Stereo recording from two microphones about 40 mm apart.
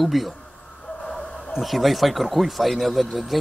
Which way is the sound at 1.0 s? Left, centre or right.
Centre.